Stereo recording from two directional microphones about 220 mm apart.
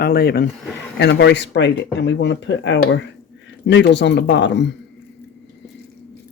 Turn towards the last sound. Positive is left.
turn(degrees=50)  # may be behind; listen again after turning